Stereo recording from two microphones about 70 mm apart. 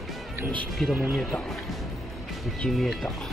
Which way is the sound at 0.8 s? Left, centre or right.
Centre.